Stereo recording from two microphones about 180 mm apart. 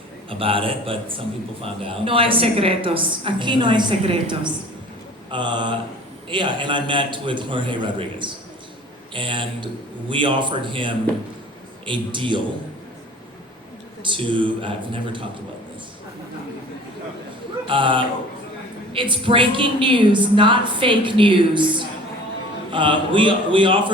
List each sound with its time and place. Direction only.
0.3 s a woman's voice: 30° right (ahead or behind)
14.0 s a woman's voice: 25° right (ahead or behind)
17.7 s a woman's voice: 30° right (ahead or behind)